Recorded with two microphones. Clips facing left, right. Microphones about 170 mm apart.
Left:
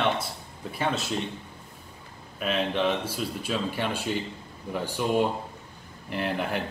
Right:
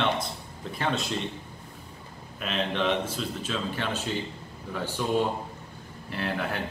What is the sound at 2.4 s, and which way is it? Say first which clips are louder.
Speech: left 2 dB; 10° left (ahead or behind).